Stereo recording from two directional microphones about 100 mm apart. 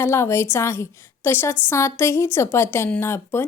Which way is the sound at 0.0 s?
30° left (ahead or behind).